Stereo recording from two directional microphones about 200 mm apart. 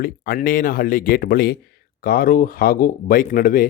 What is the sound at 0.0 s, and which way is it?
Speech, 45° left (ahead or behind).